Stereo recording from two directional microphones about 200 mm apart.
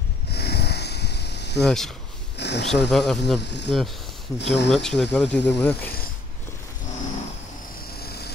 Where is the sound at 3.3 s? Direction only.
60° left (ahead or behind).